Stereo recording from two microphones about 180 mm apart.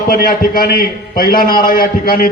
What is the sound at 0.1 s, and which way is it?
A man's voice, 50° left (ahead or behind).